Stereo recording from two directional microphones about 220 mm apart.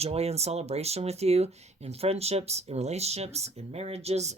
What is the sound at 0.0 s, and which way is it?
Speech, 30° right (ahead or behind).